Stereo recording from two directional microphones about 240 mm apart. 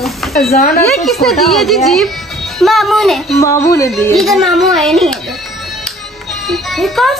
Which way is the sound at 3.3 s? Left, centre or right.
Centre.